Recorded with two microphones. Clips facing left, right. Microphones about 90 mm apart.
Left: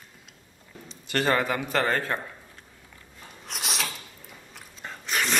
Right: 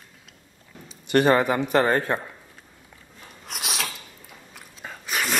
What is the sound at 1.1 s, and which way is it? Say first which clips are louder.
A man's voice: right 6 dB; 20° right (ahead or behind).